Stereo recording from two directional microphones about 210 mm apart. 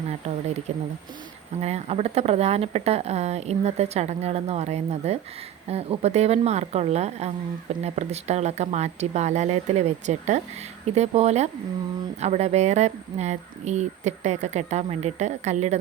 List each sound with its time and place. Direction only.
0.1 s speech: 30° right (ahead or behind)
1.6 s speech: 30° right (ahead or behind)